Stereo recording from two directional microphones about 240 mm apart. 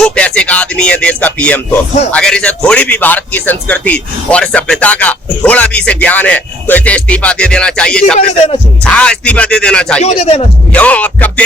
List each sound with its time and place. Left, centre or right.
0.0 s a man's voice: centre
10.0 s speech: left
10.7 s a man's voice: centre